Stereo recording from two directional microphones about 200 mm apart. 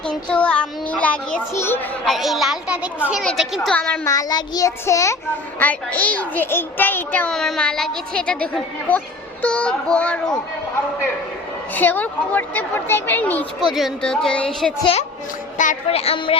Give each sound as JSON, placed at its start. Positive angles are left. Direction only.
{"t": 0.1, "sound": "a child's voice", "side_deg": 5}
{"t": 2.0, "sound": "a woman's voice", "side_deg": 0}
{"t": 4.0, "sound": "a child's voice", "side_deg": 15}
{"t": 11.7, "sound": "a child's voice", "side_deg": 10}
{"t": 13.6, "sound": "a woman's voice", "side_deg": 0}
{"t": 15.5, "sound": "a woman's voice", "side_deg": 40}